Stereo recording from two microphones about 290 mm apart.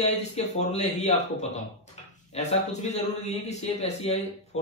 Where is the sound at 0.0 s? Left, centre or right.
Left.